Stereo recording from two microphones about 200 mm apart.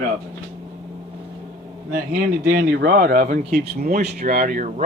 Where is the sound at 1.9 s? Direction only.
50° right (ahead or behind).